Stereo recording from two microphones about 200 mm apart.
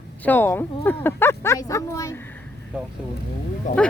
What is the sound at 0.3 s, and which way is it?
Speech, 10° left (ahead or behind).